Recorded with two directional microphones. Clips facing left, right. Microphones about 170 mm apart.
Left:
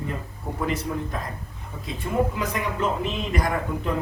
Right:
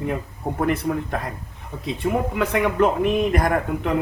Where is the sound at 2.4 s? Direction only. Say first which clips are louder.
Right 7 dB; 65° right (ahead or behind).